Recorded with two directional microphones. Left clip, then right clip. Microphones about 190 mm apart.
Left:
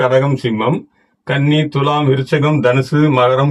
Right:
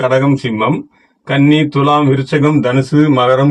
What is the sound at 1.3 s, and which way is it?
Speech, 20° left (ahead or behind).